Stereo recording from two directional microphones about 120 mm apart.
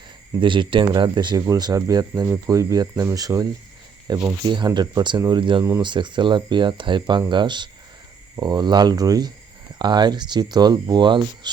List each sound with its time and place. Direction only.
0.3 s speech: 45° right (ahead or behind)